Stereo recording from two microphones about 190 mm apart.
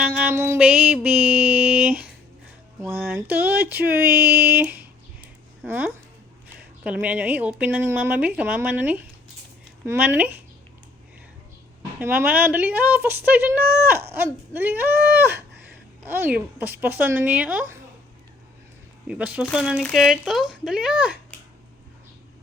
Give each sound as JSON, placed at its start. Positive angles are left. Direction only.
{"t": 0.0, "sound": "mantra", "side_deg": -10}
{"t": 2.8, "sound": "speech", "side_deg": -10}
{"t": 11.9, "sound": "speech", "side_deg": -10}
{"t": 19.0, "sound": "speech", "side_deg": -5}